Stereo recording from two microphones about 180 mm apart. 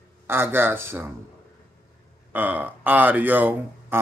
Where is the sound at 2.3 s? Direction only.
10° right (ahead or behind).